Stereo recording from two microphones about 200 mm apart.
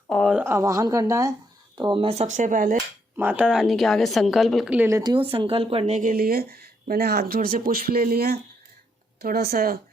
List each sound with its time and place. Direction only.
0.1 s speech: centre (ahead or behind)
0.4 s a woman's voice: 15° right (ahead or behind); by 2.8 s 40° right (ahead or behind)
3.2 s a woman's voice: 10° right (ahead or behind); by 9.7 s 50° right (ahead or behind)